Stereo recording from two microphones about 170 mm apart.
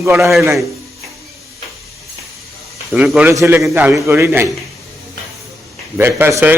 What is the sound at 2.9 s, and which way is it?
A man's voice, 10° right (ahead or behind).